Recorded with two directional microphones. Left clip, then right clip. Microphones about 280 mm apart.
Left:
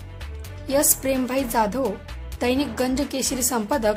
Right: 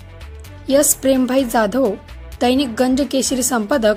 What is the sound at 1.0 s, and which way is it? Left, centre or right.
A woman's voice, centre.